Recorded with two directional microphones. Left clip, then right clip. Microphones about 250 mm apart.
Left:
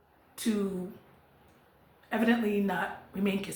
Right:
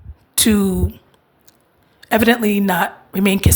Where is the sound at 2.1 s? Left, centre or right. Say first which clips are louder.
Right 14 dB; right.